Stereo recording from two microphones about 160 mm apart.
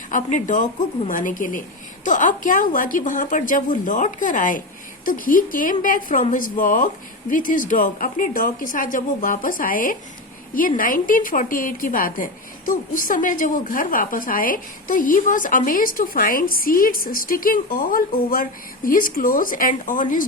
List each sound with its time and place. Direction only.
0.1 s a woman's voice: 55° left (ahead or behind)